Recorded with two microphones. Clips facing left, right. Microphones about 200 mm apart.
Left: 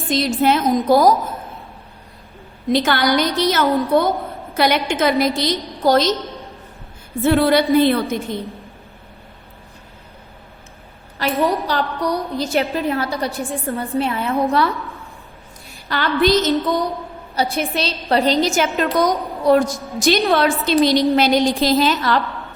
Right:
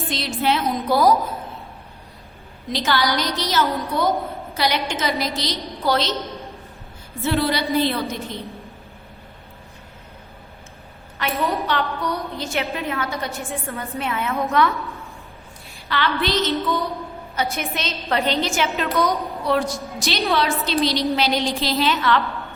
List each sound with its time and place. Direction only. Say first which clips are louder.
0.1 s a woman's voice: left 7 dB; 45° left (ahead or behind)
2.6 s a woman's voice: left 5 dB; 55° left (ahead or behind)
7.2 s a woman's voice: left 7 dB; 55° left (ahead or behind)
11.2 s a woman's voice: left 5 dB; 35° left (ahead or behind)
15.9 s a woman's voice: left 6 dB; 45° left (ahead or behind)